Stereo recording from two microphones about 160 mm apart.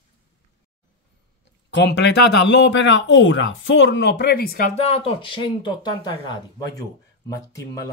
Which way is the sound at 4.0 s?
90° left.